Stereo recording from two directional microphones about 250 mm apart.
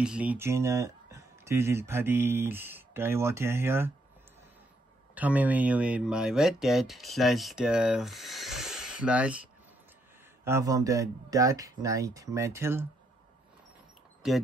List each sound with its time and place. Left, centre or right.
0.0 s speech: centre
5.1 s speech: centre
10.4 s speech: centre